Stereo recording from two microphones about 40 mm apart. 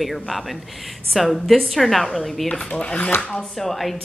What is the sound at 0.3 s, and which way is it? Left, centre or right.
A woman's voice, centre.